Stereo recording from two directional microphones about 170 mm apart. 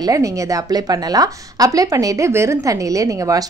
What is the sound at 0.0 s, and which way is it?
A woman's voice, 20° right (ahead or behind).